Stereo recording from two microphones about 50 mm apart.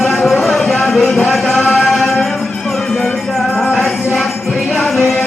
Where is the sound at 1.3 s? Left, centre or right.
Centre.